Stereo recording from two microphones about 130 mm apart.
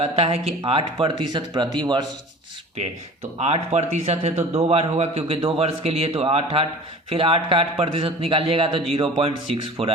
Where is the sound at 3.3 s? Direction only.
60° right (ahead or behind).